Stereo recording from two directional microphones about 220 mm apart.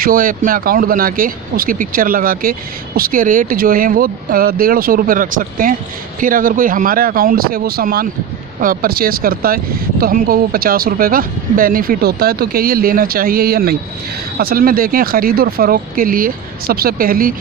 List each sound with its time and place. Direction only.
0.0 s speech: 40° right (ahead or behind)